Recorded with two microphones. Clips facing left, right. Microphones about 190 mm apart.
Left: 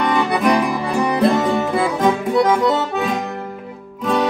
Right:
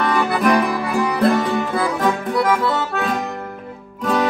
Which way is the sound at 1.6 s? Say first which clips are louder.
Left 2 dB; 20° left (ahead or behind).